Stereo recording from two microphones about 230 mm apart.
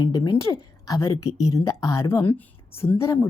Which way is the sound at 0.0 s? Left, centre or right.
Centre.